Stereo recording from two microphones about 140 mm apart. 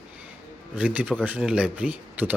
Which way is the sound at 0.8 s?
10° right (ahead or behind).